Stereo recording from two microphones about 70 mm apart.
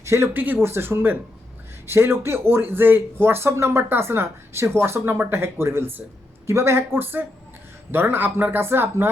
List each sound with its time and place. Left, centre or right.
0.0 s speech: right
0.3 s speech: right